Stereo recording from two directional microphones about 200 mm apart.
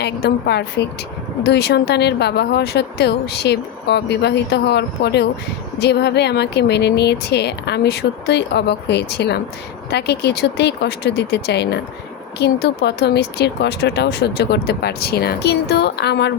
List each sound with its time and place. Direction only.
0.0 s speech: 55° left (ahead or behind)